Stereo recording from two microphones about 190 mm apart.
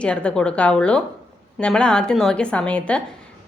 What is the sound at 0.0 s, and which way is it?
A woman's voice, 5° left (ahead or behind).